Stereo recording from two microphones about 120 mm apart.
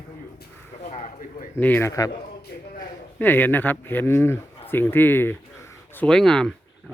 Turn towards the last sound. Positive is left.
turn(degrees=5)  # may be behind; listen again after turning